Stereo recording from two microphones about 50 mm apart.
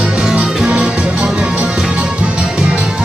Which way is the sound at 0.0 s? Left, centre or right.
Centre.